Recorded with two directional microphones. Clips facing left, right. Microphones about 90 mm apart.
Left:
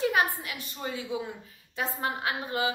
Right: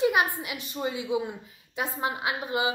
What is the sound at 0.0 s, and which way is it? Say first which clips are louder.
A woman's voice: right 2 dB; 15° right (ahead or behind).